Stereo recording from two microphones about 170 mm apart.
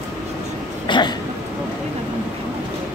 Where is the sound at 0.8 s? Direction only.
25° left (ahead or behind).